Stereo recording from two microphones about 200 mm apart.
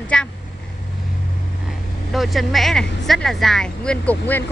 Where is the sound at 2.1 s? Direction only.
Centre (ahead or behind).